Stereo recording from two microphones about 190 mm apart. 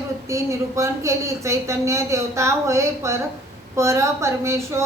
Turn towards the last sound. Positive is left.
turn(degrees=-15)  # may be behind; listen again after turning